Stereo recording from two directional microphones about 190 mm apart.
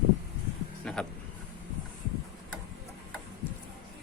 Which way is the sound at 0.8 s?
5° left (ahead or behind).